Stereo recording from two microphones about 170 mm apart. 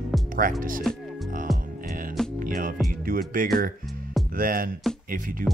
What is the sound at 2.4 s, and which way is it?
Music, 55° right (ahead or behind).